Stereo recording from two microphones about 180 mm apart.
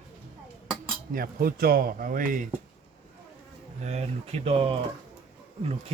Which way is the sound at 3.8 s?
40° right (ahead or behind).